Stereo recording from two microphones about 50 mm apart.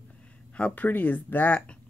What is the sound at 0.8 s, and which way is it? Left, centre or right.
Speech, left.